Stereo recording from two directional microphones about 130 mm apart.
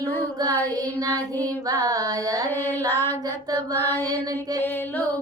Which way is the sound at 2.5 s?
15° left (ahead or behind).